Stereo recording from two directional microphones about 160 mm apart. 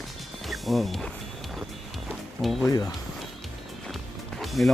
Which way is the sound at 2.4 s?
Centre (ahead or behind).